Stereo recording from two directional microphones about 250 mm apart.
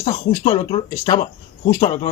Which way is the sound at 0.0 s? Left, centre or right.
Left.